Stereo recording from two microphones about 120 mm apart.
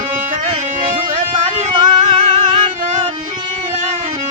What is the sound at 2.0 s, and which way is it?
Music, 70° right (ahead or behind).